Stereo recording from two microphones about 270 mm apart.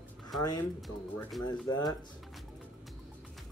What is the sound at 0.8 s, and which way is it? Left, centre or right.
Speech, centre.